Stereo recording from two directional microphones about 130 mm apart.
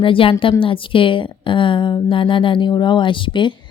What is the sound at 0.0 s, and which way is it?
A woman's voice, 40° left (ahead or behind).